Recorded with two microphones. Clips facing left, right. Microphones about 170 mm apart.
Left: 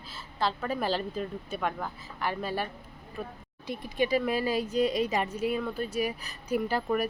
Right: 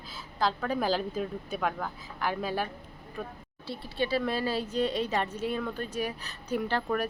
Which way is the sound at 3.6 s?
15° left (ahead or behind).